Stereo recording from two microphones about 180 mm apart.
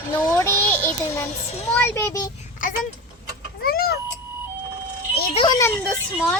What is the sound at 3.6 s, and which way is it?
Vehicle, 55° left (ahead or behind).